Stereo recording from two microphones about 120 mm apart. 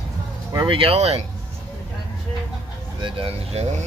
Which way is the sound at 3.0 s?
50° right (ahead or behind).